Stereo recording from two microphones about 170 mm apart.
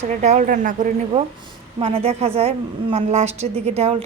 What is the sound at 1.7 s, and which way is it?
A woman's voice, 35° right (ahead or behind).